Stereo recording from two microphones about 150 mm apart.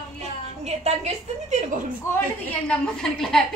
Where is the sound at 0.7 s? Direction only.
45° right (ahead or behind).